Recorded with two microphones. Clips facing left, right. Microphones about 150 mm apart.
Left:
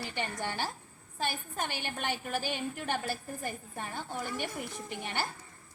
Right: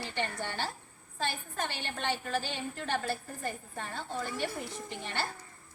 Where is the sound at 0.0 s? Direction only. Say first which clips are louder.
Even; 15° left (ahead or behind).